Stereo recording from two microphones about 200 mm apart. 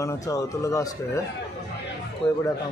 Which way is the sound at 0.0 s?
15° left (ahead or behind).